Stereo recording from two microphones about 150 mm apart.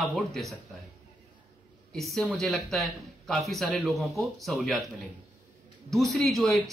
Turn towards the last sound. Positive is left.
turn(degrees=0)  # may be behind; listen again after turning